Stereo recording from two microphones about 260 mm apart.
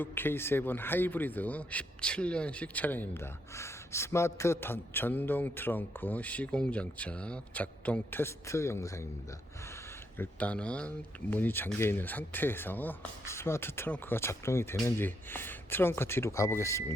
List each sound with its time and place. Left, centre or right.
0.0 s speech: centre
10.2 s speech: centre